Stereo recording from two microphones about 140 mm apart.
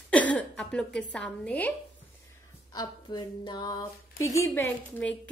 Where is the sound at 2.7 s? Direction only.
30° left (ahead or behind).